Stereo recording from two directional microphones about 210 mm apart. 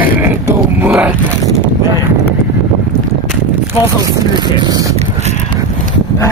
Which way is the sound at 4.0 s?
20° right (ahead or behind).